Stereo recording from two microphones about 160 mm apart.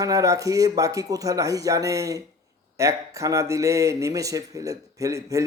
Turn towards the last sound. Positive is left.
turn(degrees=-20)  # may be behind; listen again after turning